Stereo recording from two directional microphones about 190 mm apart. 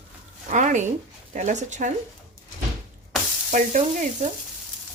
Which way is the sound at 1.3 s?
40° right (ahead or behind).